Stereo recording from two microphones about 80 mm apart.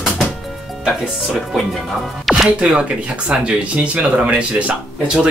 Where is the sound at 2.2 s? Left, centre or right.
Centre.